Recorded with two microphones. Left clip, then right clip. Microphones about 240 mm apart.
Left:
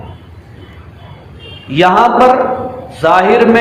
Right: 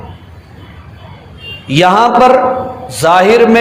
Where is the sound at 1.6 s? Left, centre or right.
Right.